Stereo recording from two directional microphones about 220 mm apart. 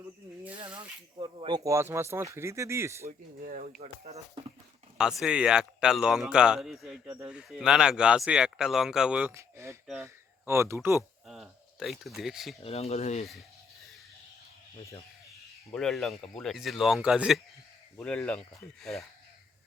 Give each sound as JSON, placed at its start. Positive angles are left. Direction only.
{"t": 0.6, "sound": "speech", "side_deg": -20}
{"t": 3.1, "sound": "speech", "side_deg": -40}
{"t": 3.8, "sound": "speech", "side_deg": -30}
{"t": 4.9, "sound": "speech", "side_deg": -5}
{"t": 12.6, "sound": "speech", "side_deg": 30}
{"t": 15.7, "sound": "speech", "side_deg": 0}